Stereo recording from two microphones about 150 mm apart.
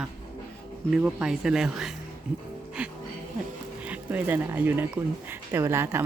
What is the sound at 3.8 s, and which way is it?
Speech, 10° right (ahead or behind).